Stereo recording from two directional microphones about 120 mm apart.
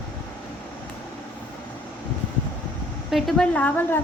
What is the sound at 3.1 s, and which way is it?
Speech, centre (ahead or behind).